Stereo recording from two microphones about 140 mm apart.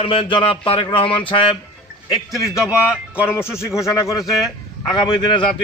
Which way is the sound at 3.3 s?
15° left (ahead or behind).